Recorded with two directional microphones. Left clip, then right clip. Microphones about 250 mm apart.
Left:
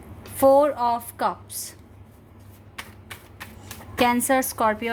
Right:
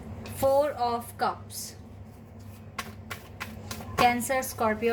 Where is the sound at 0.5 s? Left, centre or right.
Left.